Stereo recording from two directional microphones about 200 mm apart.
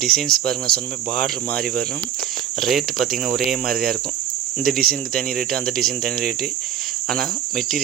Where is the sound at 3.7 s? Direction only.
50° right (ahead or behind).